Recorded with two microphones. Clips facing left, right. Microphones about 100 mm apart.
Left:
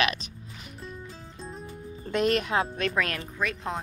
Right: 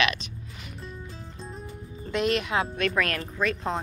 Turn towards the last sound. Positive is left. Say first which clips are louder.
# right 3 dB
turn(degrees=5)  # may be behind; listen again after turning